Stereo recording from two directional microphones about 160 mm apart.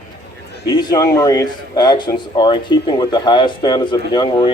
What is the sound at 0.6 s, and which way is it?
A man's voice, 25° left (ahead or behind).